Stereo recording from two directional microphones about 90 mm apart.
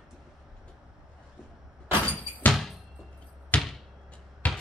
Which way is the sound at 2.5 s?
Centre (ahead or behind).